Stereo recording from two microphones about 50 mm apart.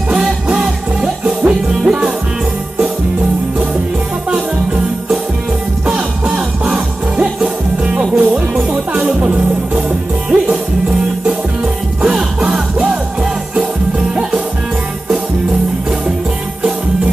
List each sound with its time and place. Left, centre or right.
0.1 s music: centre
6.2 s music: centre
12.0 s music: centre